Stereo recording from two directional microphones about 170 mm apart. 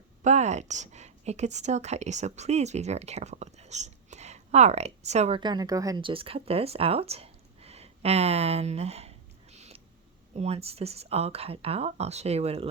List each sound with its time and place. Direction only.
0.2 s a woman's voice: 40° right (ahead or behind)
5.4 s speech: 25° right (ahead or behind)